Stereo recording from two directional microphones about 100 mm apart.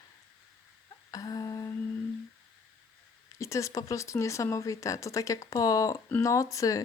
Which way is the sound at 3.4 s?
30° left (ahead or behind).